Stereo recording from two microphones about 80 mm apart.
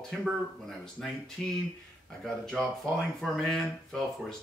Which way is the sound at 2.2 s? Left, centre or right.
Centre.